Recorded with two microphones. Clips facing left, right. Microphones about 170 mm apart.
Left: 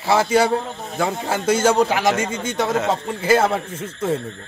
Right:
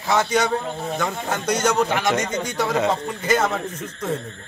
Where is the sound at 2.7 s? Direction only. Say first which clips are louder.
Even; centre (ahead or behind).